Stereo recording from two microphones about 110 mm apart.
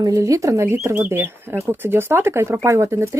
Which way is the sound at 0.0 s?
30° right (ahead or behind).